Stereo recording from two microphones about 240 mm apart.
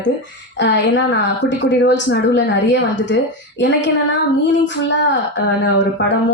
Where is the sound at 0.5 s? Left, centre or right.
Left.